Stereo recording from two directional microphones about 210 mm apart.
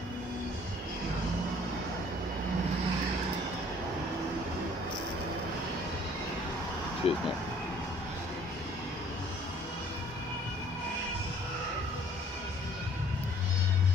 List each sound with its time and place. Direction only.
7.0 s speech: 25° left (ahead or behind)